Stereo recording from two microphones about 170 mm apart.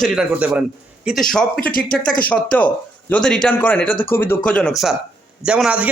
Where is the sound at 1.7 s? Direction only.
55° left (ahead or behind).